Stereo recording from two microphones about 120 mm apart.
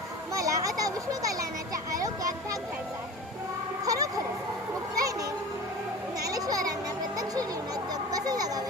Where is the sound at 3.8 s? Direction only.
30° right (ahead or behind).